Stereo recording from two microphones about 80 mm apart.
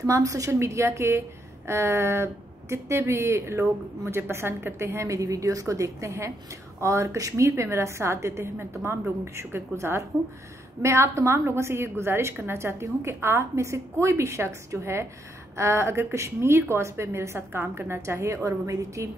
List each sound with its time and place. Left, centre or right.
0.0 s a woman's voice: right